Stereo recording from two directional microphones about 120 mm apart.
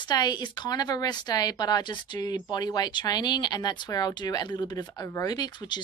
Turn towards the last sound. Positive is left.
turn(degrees=35)  # may be behind; listen again after turning